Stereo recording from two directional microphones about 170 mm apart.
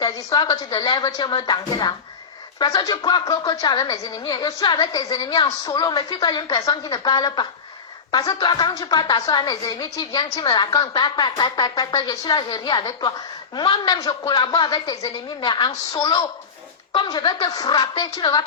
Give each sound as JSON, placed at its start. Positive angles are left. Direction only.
{"t": 0.0, "sound": "a woman's voice", "side_deg": 25}